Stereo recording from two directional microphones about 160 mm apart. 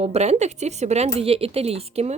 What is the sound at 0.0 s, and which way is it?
Speech, 45° right (ahead or behind).